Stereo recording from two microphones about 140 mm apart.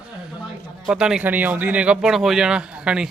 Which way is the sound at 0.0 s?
5° right (ahead or behind).